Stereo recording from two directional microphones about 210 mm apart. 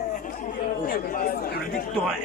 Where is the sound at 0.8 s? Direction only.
40° left (ahead or behind).